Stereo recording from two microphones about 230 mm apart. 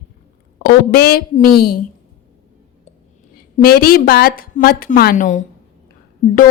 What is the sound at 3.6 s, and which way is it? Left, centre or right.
A woman's voice, left.